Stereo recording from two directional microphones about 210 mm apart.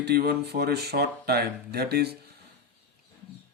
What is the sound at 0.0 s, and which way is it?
Speech, 50° right (ahead or behind).